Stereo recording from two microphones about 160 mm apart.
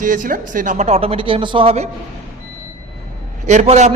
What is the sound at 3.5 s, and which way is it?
Speech, 45° right (ahead or behind).